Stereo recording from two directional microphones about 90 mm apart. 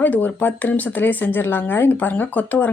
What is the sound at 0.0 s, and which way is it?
Speech, 20° left (ahead or behind).